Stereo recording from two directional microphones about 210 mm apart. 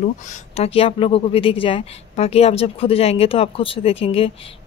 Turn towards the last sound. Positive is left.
turn(degrees=25)  # may be behind; listen again after turning